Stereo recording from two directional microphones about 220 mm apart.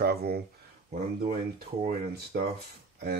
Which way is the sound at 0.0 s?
45° right (ahead or behind).